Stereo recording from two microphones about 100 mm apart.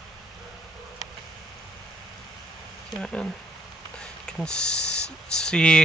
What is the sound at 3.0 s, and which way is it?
Speech, 5° left (ahead or behind).